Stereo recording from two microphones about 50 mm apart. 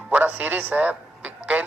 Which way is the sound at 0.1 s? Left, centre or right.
Right.